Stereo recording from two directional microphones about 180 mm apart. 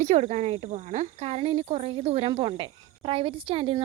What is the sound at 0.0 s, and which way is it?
Speech, 40° right (ahead or behind).